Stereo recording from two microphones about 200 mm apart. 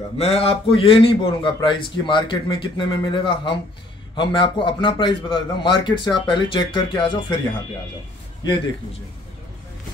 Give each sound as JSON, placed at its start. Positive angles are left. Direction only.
{"t": 0.2, "sound": "a man's voice", "side_deg": 30}